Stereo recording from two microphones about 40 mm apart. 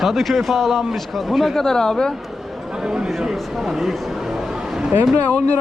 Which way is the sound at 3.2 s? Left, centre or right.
Centre.